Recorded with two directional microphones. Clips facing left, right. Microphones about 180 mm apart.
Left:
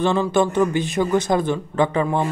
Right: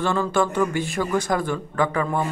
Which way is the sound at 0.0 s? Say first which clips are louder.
Left 3 dB; 20° left (ahead or behind).